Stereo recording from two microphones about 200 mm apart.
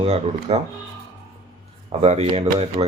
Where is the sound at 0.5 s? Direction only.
30° right (ahead or behind).